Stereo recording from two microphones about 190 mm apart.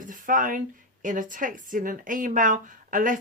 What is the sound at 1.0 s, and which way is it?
Speech, 45° right (ahead or behind).